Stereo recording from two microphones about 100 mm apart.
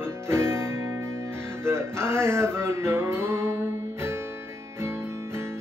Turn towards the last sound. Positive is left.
turn(degrees=-25)  # may be behind; listen again after turning